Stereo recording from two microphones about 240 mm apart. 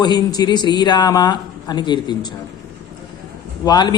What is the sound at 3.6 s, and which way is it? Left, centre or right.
Speech, centre.